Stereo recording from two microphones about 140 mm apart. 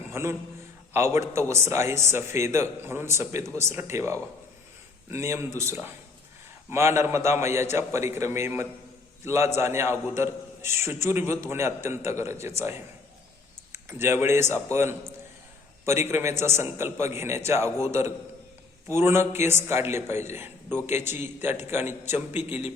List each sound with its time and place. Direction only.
0.1 s a man's voice: 20° right (ahead or behind)
13.8 s a man's voice: 15° right (ahead or behind)